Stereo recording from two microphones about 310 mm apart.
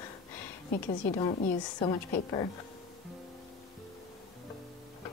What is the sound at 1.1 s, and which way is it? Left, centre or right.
Speech, centre.